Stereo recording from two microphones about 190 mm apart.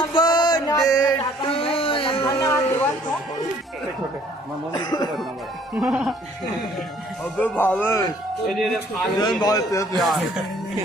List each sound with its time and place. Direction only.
0.0 s music: 25° left (ahead or behind)
2.4 s a sound: 15° left (ahead or behind)
4.7 s a man's voice: 20° left (ahead or behind)
5.7 s speech: 5° right (ahead or behind)
7.3 s speech: 10° left (ahead or behind)
8.4 s speech: centre (ahead or behind)
9.4 s a man's voice: 20° left (ahead or behind)
9.9 s speech: centre (ahead or behind)